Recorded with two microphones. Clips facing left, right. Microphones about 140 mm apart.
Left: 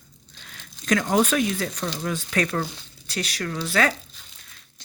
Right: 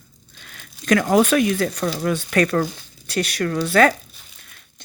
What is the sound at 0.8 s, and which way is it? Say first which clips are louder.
A woman's voice: right 5 dB; 65° right (ahead or behind).